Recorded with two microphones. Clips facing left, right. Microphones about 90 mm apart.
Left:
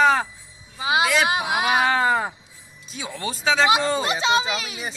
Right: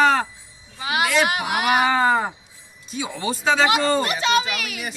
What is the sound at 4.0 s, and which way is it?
Speech, 20° left (ahead or behind).